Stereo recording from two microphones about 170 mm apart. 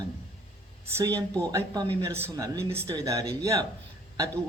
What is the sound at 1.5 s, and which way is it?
A man's voice, 20° right (ahead or behind).